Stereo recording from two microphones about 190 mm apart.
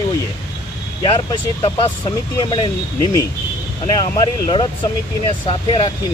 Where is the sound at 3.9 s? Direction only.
25° left (ahead or behind).